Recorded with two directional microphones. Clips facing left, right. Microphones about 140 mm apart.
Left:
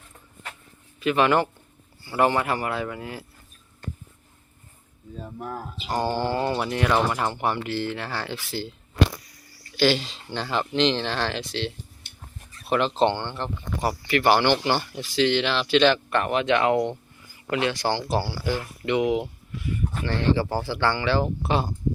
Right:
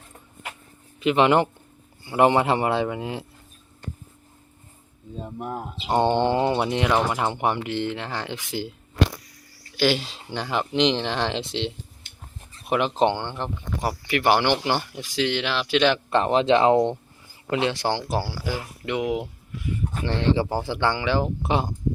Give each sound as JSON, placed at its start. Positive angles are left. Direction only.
{"t": 0.9, "sound": "speech", "side_deg": -20}
{"t": 5.1, "sound": "speech", "side_deg": -20}
{"t": 9.7, "sound": "speech", "side_deg": -10}
{"t": 12.6, "sound": "speech", "side_deg": -15}
{"t": 16.0, "sound": "speech", "side_deg": -25}
{"t": 20.1, "sound": "speech", "side_deg": -20}